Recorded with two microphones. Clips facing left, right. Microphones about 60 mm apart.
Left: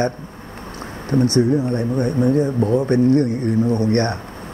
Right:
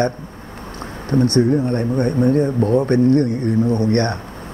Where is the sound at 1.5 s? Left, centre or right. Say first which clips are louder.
Right 1 dB; right.